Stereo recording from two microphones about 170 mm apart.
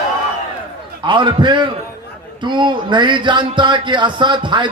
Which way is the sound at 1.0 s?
30° right (ahead or behind).